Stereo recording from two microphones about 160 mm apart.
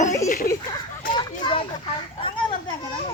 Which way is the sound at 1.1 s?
30° left (ahead or behind).